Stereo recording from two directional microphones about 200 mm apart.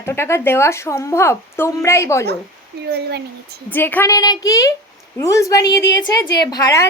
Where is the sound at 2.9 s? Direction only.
55° right (ahead or behind).